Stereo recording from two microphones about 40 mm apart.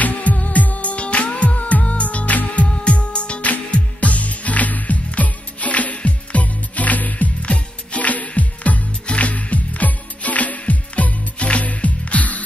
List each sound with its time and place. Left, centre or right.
0.0 s music: left
7.4 s music: left